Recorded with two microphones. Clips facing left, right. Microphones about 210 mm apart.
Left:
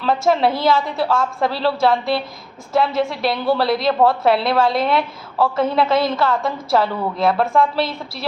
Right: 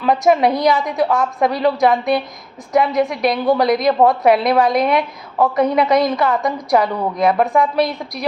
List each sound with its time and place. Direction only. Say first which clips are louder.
0.0 s a woman's voice: right 3 dB; 15° right (ahead or behind)